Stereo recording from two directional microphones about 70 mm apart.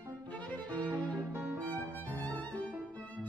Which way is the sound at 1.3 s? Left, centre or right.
Right.